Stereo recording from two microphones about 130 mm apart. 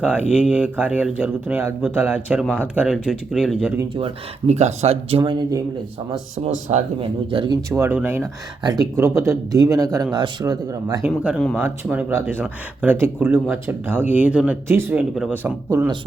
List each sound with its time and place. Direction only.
0.0 s speech: 10° right (ahead or behind)
4.4 s speech: 55° right (ahead or behind)
5.2 s speech: 35° right (ahead or behind)
6.4 s speech: 65° right (ahead or behind)
7.3 s speech: 35° right (ahead or behind)
7.8 s speech: 15° right (ahead or behind)
8.6 s speech: 30° right (ahead or behind)
11.3 s speech: 5° left (ahead or behind)
11.6 s speech: 10° right (ahead or behind)